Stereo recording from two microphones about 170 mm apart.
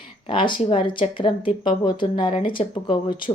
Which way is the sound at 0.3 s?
30° left (ahead or behind).